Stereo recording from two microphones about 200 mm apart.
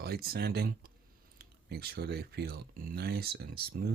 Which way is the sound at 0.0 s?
50° right (ahead or behind).